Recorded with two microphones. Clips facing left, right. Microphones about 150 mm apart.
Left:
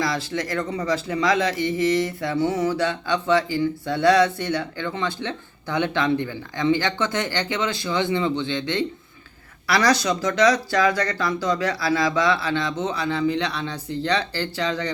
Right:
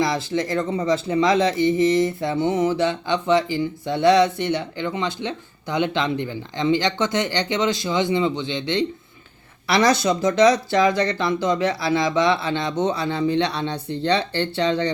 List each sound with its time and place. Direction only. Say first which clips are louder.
0.0 s speech: right 3 dB; 25° right (ahead or behind)